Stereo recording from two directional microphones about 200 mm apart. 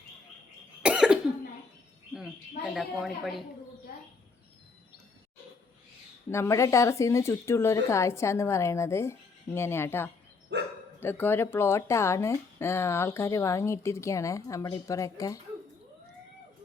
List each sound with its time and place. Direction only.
0.8 s cough: 5° right (ahead or behind)
2.7 s a woman's voice: centre (ahead or behind)
6.3 s a woman's voice: 15° left (ahead or behind)
10.5 s dog: 60° right (ahead or behind)
11.0 s a woman's voice: 10° left (ahead or behind)